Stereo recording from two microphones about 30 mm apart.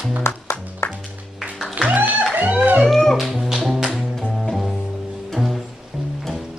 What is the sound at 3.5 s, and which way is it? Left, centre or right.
Tap, centre.